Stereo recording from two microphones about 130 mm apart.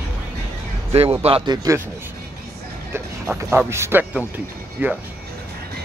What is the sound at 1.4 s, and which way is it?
Speech, 30° right (ahead or behind).